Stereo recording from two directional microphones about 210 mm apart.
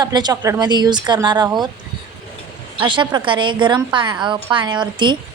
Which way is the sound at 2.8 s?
20° right (ahead or behind).